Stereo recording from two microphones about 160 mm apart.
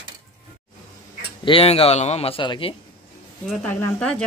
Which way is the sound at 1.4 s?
35° left (ahead or behind).